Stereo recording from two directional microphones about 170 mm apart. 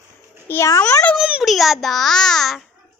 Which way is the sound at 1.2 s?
5° right (ahead or behind).